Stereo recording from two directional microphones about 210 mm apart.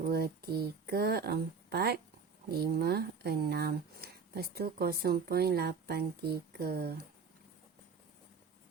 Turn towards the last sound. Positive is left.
turn(degrees=-45)  # may be behind; listen again after turning